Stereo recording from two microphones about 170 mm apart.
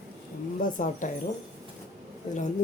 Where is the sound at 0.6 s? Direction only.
50° left (ahead or behind).